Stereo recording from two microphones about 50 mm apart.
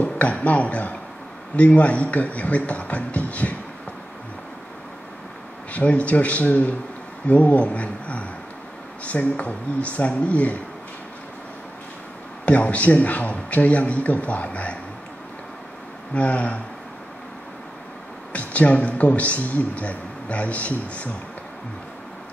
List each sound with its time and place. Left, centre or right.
0.0 s a man's voice: left
5.7 s a man's voice: left
12.4 s a man's voice: left
16.2 s a man's voice: left
18.3 s a man's voice: left